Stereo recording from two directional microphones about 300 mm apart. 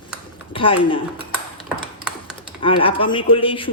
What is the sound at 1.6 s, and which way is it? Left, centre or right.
Computer keyboard, centre.